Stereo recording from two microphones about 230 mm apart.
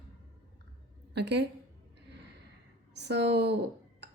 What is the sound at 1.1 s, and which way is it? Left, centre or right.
Speech, right.